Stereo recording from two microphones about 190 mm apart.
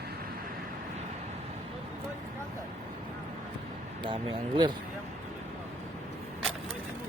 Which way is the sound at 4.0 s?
25° right (ahead or behind).